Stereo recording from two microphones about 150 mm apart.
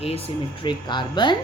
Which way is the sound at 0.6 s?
30° left (ahead or behind).